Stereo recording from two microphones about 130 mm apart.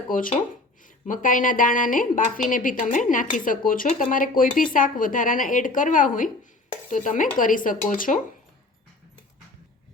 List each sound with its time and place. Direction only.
0.1 s a woman's voice: 90° left
6.9 s cutlery: 80° left
7.3 s a woman's voice: 90° left